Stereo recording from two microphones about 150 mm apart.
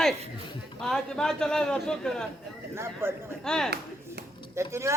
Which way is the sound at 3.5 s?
5° left (ahead or behind).